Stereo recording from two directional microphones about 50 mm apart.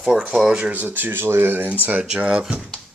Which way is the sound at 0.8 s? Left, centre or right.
Right.